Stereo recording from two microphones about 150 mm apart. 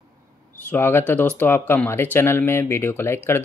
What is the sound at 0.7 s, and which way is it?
Speech, 15° left (ahead or behind).